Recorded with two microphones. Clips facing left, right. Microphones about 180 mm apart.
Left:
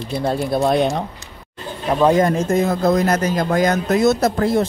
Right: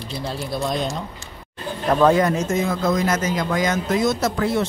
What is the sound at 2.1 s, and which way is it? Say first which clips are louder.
Speech: left 3 dB; 50° left (ahead or behind).